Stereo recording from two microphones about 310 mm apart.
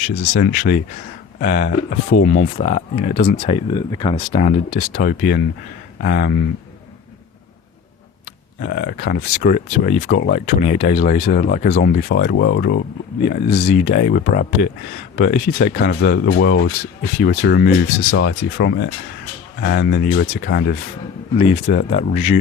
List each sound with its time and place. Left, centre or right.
0.3 s speech: left
8.6 s speech: left